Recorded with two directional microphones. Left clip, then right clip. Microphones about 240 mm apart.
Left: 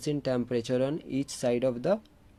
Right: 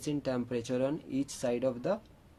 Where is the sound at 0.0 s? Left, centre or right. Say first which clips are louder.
Left 4 dB; left.